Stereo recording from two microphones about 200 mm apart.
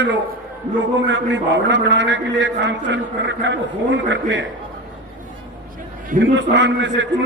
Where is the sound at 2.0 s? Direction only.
65° right (ahead or behind).